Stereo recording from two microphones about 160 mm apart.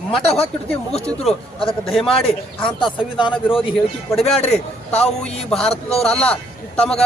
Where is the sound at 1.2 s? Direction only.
35° left (ahead or behind).